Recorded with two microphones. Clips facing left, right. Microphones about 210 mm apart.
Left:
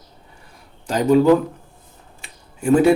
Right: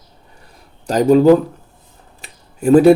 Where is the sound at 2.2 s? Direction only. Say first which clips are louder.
Right 6 dB; 35° right (ahead or behind).